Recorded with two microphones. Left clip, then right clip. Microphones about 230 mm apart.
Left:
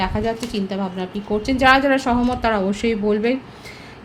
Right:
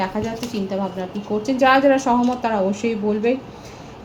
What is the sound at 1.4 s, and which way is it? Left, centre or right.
A woman's voice, left.